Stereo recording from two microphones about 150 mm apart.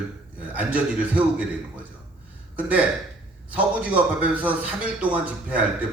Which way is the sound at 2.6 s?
10° right (ahead or behind).